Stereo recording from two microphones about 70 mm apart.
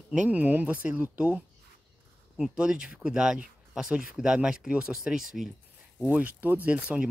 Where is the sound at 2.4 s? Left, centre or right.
Centre.